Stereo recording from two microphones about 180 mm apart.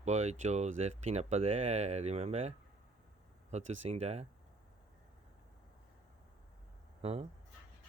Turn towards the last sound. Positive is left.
turn(degrees=-35)  # may be behind; listen again after turning